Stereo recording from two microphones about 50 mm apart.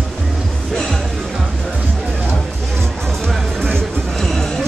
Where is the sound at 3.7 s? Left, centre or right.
Centre.